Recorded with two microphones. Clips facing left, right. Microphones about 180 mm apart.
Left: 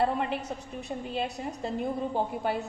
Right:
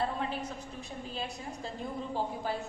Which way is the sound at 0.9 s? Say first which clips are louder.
Left 8 dB; 65° left (ahead or behind).